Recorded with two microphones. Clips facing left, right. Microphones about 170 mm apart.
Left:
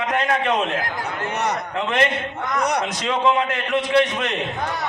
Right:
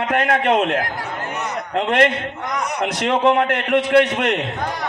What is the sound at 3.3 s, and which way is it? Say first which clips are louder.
A man's voice: right 3 dB; 65° right (ahead or behind).